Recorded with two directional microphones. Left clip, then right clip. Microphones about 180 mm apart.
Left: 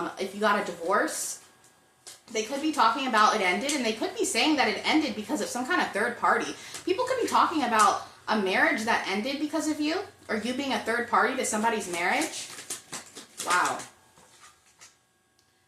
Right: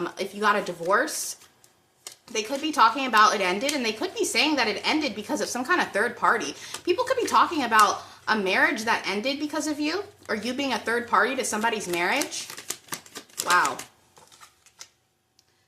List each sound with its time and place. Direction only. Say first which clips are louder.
0.2 s a woman's voice: right 2 dB; 25° right (ahead or behind)
2.3 s a woman's voice: right 2 dB; 25° right (ahead or behind)
13.3 s speech: right 4 dB; 35° right (ahead or behind)